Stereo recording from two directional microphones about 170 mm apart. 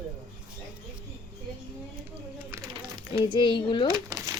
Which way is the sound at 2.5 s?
15° right (ahead or behind).